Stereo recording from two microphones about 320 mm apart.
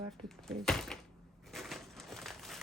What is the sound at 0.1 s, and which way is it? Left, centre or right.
Speech, centre.